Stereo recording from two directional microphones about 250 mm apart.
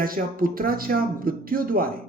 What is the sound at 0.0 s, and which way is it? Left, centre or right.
Speech, right.